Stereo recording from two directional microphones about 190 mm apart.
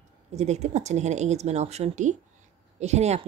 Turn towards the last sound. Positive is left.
turn(degrees=-35)  # may be behind; listen again after turning